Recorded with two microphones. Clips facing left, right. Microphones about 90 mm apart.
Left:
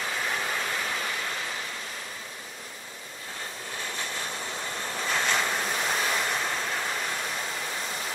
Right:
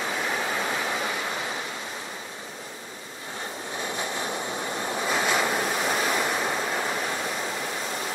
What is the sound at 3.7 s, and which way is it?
Waves, 20° right (ahead or behind).